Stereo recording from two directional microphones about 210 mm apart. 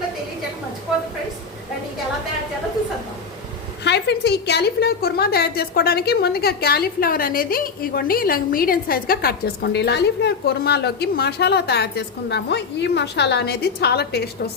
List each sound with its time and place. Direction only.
3.8 s a woman's voice: 50° left (ahead or behind)